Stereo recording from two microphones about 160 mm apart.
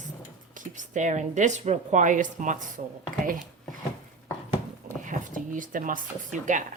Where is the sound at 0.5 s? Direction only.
50° right (ahead or behind).